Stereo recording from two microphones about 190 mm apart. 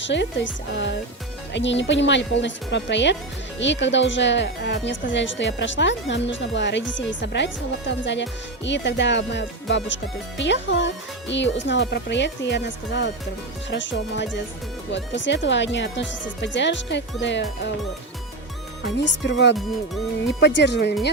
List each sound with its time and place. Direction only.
0.0 s speech: 70° left (ahead or behind)
18.8 s speech: 70° left (ahead or behind)
19.5 s speech: centre (ahead or behind)
20.4 s speech: 65° left (ahead or behind)